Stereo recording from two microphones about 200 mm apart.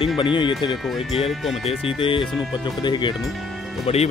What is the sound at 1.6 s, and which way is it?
Speech, 30° left (ahead or behind).